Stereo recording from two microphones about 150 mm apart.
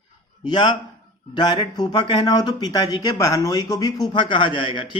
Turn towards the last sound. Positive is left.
turn(degrees=35)  # may be behind; listen again after turning